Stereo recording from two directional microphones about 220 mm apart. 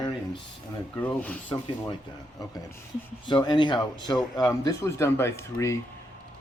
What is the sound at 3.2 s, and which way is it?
Speech, 20° left (ahead or behind).